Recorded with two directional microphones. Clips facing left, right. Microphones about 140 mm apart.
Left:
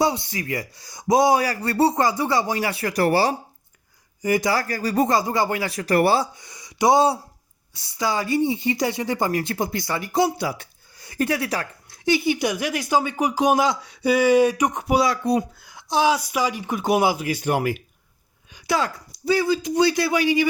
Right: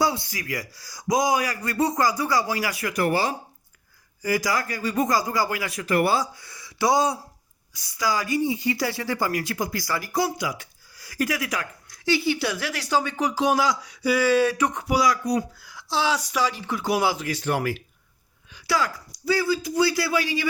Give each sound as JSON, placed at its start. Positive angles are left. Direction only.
{"t": 0.0, "sound": "speech", "side_deg": 20}
{"t": 4.2, "sound": "speech", "side_deg": 25}
{"t": 12.0, "sound": "speech", "side_deg": 20}